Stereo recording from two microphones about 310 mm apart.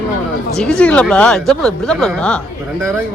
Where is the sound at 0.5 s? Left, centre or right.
Centre.